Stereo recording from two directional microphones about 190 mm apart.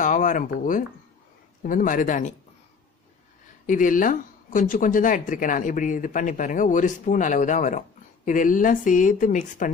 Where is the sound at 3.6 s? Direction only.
45° left (ahead or behind).